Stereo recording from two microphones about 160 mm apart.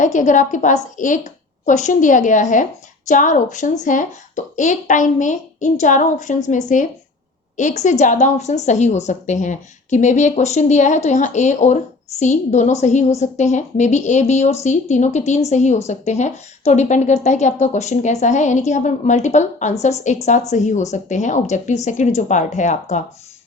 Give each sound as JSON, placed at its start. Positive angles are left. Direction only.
{"t": 0.0, "sound": "a woman's voice", "side_deg": 50}